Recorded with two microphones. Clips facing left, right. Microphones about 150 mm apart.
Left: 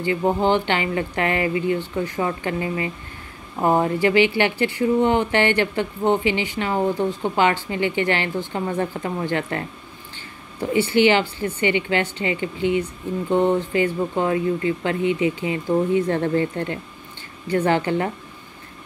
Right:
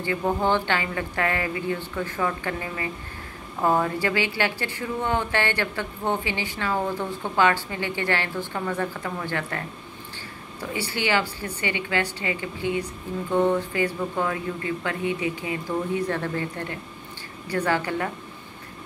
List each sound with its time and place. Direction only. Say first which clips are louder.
0.0 s speech: left 4 dB; 20° left (ahead or behind)
10.6 s speech: left 11 dB; 20° left (ahead or behind)